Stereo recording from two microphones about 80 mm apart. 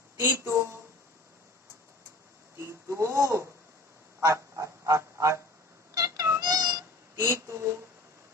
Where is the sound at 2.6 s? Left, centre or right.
Right.